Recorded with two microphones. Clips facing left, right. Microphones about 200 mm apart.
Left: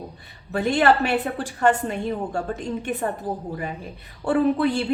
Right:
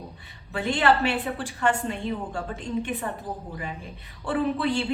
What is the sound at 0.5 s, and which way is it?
A woman's voice, 45° left (ahead or behind).